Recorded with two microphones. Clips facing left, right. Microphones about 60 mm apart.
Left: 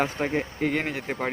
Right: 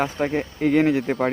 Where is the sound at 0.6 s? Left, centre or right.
Left.